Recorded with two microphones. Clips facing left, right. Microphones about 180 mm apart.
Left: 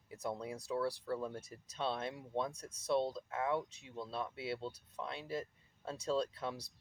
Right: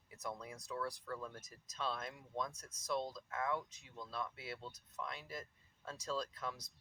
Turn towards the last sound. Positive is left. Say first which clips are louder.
# left 6 dB
turn(degrees=30)  # may be behind; listen again after turning